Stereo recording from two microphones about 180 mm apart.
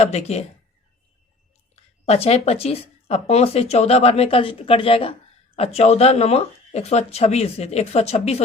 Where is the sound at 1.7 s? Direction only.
35° left (ahead or behind).